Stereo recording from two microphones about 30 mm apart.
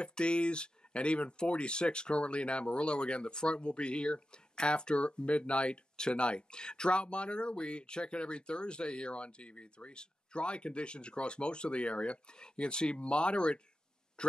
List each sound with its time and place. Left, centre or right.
0.2 s speech: left